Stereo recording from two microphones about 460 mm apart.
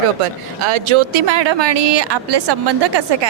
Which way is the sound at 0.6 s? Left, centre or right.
Right.